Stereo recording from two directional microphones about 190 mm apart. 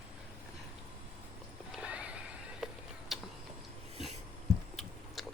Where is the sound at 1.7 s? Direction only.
5° right (ahead or behind).